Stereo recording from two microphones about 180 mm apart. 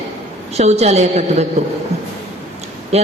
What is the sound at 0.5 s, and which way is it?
Speech, 35° right (ahead or behind).